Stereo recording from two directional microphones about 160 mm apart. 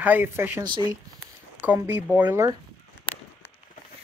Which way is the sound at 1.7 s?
10° right (ahead or behind).